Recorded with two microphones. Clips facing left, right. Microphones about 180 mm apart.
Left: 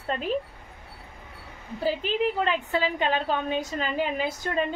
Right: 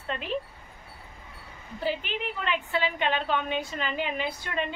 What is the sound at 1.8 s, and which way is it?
A woman's voice, 35° left (ahead or behind).